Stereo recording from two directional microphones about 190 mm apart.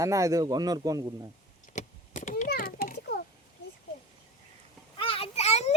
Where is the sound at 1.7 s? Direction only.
40° left (ahead or behind).